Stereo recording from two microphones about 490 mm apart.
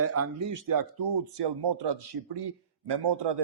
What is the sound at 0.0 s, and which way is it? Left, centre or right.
Speech, right.